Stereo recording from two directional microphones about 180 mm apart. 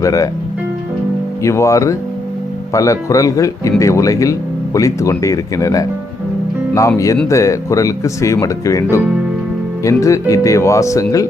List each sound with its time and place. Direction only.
0.0 s speech: 20° left (ahead or behind)
1.4 s speech: 15° left (ahead or behind)